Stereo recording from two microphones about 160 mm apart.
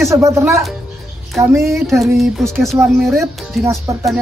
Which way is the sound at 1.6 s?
Centre (ahead or behind).